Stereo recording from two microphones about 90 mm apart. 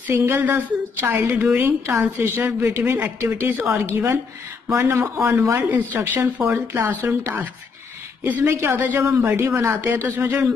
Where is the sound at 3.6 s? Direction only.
30° right (ahead or behind).